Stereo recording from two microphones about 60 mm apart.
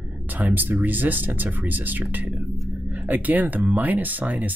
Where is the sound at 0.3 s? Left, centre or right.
Right.